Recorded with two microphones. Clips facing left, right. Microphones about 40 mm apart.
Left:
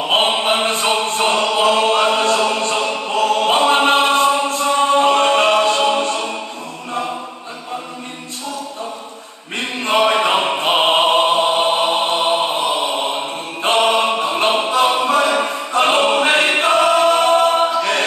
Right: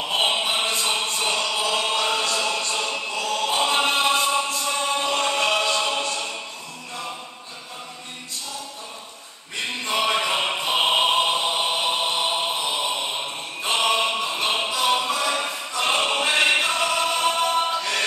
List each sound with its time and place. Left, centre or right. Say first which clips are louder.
0.1 s choir: left 7 dB; left
1.7 s a sound: left 9 dB; left
3.1 s chant: left 12 dB; left
9.6 s opera: left 8 dB; left
16.2 s choir: left 5 dB; left